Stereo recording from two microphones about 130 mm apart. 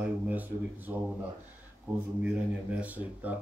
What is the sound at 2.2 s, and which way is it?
Speech, 10° right (ahead or behind).